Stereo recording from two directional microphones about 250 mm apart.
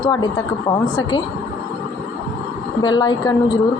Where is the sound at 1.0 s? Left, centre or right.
Centre.